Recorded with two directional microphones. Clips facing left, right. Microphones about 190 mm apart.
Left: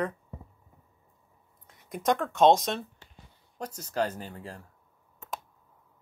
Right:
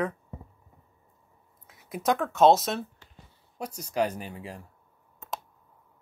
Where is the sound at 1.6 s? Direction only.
5° right (ahead or behind).